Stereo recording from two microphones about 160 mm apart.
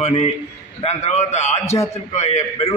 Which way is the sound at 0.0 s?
40° left (ahead or behind).